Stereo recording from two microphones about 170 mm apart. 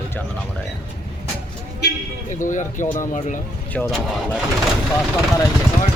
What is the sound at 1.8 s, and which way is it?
Speech, 75° left (ahead or behind).